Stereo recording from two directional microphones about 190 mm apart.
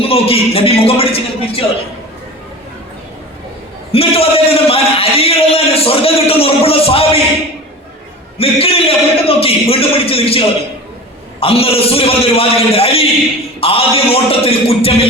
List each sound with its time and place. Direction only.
0.0 s a man's voice: 30° left (ahead or behind)
3.9 s a man's voice: 30° left (ahead or behind)
8.4 s a man's voice: 30° left (ahead or behind)